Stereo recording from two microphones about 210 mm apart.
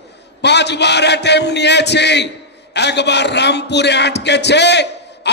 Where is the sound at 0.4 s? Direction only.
55° left (ahead or behind).